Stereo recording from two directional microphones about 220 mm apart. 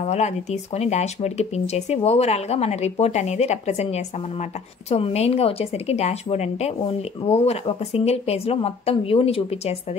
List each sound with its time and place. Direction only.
0.0 s speech: 30° left (ahead or behind)